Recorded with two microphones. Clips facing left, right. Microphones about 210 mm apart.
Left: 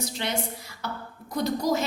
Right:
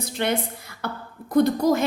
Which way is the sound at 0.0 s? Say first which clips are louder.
Right 5 dB; 55° right (ahead or behind).